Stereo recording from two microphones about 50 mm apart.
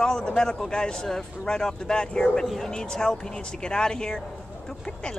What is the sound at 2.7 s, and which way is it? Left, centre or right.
Speech, centre.